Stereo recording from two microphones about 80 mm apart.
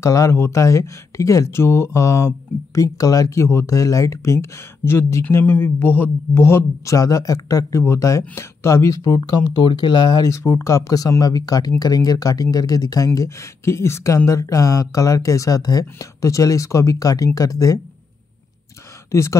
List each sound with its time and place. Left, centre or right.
0.0 s speech: left
7.0 s speech: left
10.2 s speech: left
19.1 s speech: left